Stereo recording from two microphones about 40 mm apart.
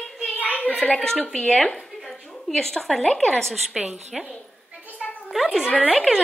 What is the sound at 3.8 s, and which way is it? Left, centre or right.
Speech, right.